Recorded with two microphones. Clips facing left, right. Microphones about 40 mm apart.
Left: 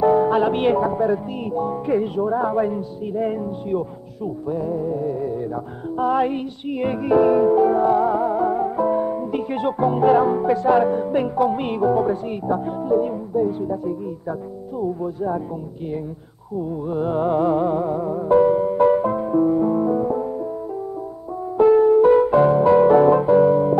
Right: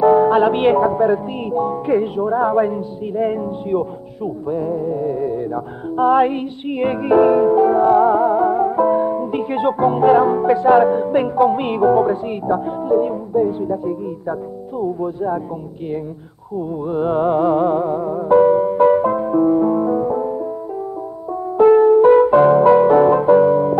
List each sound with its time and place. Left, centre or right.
0.0 s speech: centre
3.1 s music: centre
12.0 s speech: centre
16.8 s music: right
21.5 s music: centre